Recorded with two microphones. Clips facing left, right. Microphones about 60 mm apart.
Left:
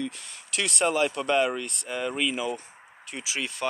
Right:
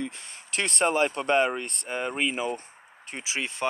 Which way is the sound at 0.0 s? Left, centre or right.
Right.